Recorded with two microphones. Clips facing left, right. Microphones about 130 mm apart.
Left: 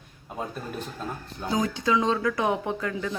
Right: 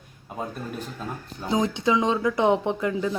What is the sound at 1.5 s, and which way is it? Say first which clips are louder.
Speech: right 2 dB; 20° right (ahead or behind).